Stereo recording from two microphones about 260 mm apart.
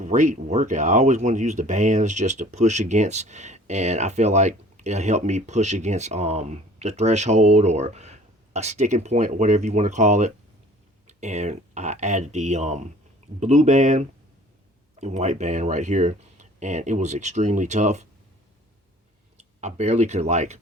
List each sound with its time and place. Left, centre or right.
0.0 s speech: right
19.6 s speech: right